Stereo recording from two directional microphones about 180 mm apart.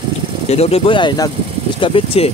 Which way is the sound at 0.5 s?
35° left (ahead or behind).